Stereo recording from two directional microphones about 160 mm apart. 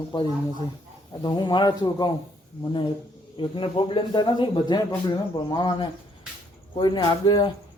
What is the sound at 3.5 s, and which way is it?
A man's voice, 35° left (ahead or behind).